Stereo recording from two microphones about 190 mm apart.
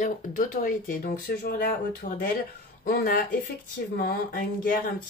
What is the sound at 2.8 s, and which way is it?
Speech, 50° left (ahead or behind).